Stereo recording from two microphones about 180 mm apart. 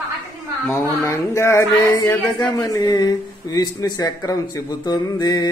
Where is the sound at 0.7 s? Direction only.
15° left (ahead or behind).